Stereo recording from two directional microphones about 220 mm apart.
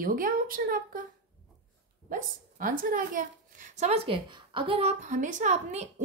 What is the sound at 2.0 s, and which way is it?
A woman's voice, 35° right (ahead or behind).